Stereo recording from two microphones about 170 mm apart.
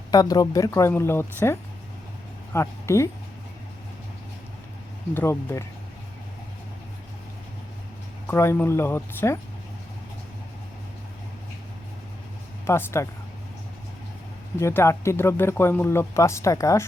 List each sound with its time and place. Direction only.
0.1 s speech: 20° left (ahead or behind)
5.1 s speech: 15° left (ahead or behind)
8.3 s speech: 15° left (ahead or behind)
12.6 s speech: 15° left (ahead or behind)
14.6 s speech: 15° left (ahead or behind)